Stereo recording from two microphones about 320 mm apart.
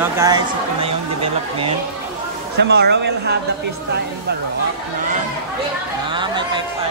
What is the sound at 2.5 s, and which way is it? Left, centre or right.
Speech, right.